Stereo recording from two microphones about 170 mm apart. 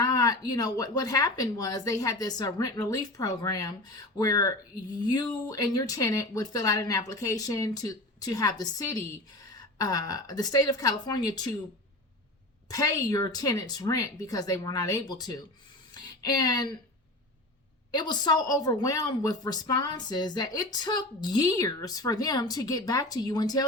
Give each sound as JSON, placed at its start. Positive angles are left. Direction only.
{"t": 0.0, "sound": "speech", "side_deg": 25}
{"t": 12.6, "sound": "speech", "side_deg": 20}
{"t": 17.9, "sound": "speech", "side_deg": 25}